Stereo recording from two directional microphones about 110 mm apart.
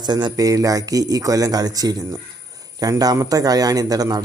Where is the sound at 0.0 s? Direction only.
40° right (ahead or behind).